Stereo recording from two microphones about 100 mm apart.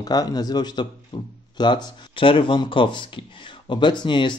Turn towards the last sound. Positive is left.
turn(degrees=50)  # may be behind; listen again after turning